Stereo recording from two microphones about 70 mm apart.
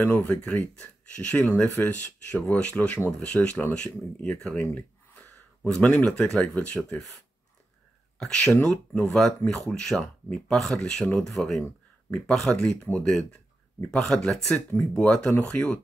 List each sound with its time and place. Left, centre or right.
0.0 s speech: left
8.2 s speech: centre